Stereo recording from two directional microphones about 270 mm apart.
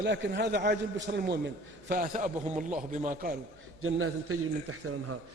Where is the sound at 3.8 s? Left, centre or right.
Right.